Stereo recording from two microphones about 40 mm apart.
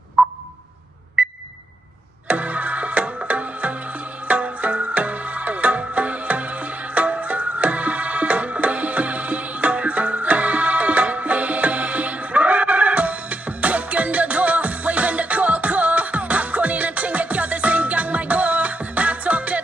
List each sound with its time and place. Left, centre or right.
2.2 s music: right